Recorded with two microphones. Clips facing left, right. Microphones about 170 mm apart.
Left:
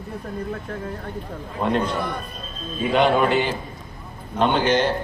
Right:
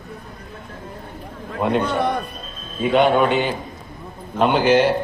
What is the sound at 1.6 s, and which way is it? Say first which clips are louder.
Speech: right 2 dB; centre (ahead or behind).